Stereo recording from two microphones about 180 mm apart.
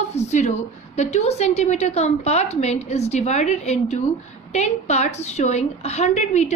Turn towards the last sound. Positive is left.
turn(degrees=40)  # may be behind; listen again after turning